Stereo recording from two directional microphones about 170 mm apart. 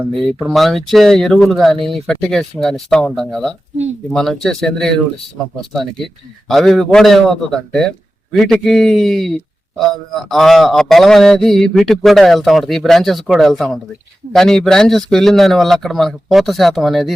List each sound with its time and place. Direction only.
0.1 s speech: 35° right (ahead or behind)
0.3 s a man's voice: centre (ahead or behind)